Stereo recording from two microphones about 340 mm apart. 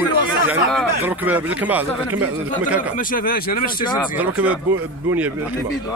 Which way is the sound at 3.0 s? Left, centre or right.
Left.